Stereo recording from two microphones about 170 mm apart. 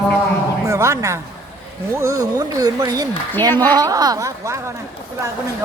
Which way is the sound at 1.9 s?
15° right (ahead or behind).